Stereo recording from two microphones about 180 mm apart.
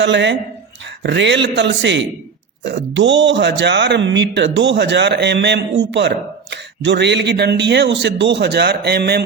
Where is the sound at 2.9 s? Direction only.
85° right.